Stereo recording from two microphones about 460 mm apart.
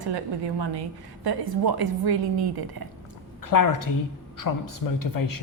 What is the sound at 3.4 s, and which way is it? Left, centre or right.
Speech, left.